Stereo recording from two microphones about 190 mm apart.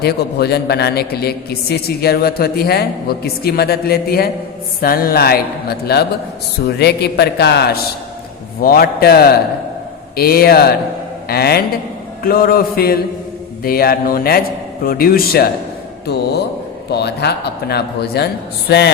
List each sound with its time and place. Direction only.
0.0 s a man's voice: 60° left (ahead or behind)